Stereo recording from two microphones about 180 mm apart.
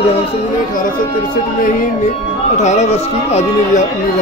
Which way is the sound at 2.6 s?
40° left (ahead or behind).